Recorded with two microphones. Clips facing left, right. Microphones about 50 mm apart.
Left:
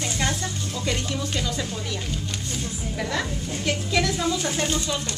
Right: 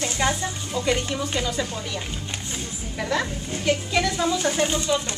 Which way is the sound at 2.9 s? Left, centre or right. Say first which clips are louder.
Right 3 dB; centre.